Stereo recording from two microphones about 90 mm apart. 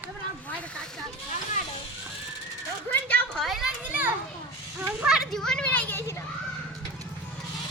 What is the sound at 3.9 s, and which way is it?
Children playing, 20° right (ahead or behind).